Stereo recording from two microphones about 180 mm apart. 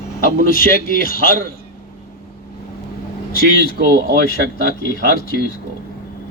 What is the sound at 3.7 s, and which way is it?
Speech, 60° right (ahead or behind).